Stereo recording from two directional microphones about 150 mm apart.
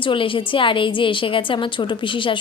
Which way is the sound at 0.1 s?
35° left (ahead or behind).